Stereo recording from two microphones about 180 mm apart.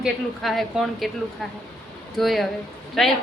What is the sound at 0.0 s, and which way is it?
A woman's voice, centre (ahead or behind).